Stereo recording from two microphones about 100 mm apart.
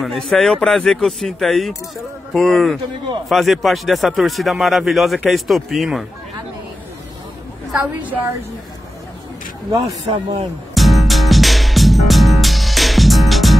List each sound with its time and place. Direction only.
0.3 s speech: 5° left (ahead or behind)
7.8 s a woman's voice: 15° right (ahead or behind)
9.8 s speech: 65° right (ahead or behind)
10.7 s music: centre (ahead or behind)